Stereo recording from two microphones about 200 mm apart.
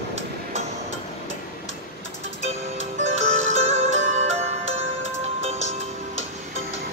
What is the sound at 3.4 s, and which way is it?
Music, 35° right (ahead or behind).